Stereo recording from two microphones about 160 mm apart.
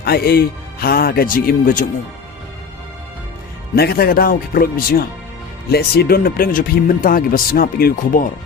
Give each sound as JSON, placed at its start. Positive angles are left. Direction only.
{"t": 0.0, "sound": "speech", "side_deg": 75}
{"t": 3.8, "sound": "speech", "side_deg": 75}
{"t": 5.6, "sound": "speech", "side_deg": 80}